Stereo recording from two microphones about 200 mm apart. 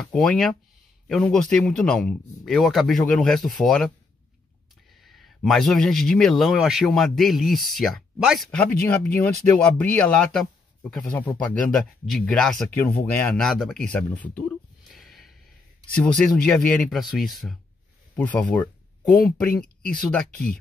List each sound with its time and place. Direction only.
0.0 s speech: 5° left (ahead or behind)
5.0 s speech: centre (ahead or behind)
14.9 s a sound: centre (ahead or behind)
16.0 s speech: 5° left (ahead or behind)